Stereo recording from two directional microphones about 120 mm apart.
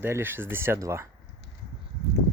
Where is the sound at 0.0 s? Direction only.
20° right (ahead or behind).